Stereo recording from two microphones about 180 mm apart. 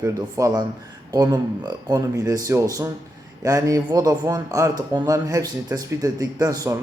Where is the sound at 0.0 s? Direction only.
15° right (ahead or behind).